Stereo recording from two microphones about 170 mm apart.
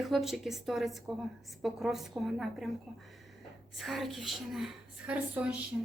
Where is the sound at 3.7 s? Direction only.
Centre (ahead or behind).